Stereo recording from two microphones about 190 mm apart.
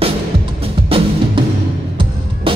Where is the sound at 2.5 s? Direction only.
30° right (ahead or behind).